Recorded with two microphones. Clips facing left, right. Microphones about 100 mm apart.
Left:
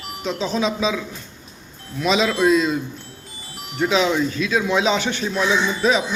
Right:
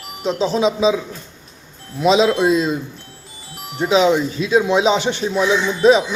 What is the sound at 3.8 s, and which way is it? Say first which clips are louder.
Speech: right 4 dB; 20° right (ahead or behind).